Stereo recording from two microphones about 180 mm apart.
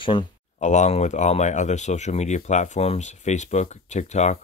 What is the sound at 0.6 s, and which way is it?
Speech, 40° left (ahead or behind).